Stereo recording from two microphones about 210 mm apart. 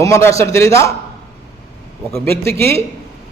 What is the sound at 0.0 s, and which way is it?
Speech, 15° left (ahead or behind).